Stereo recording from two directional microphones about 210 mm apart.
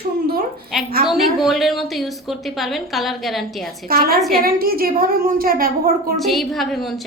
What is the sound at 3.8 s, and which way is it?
A woman's voice, 45° right (ahead or behind).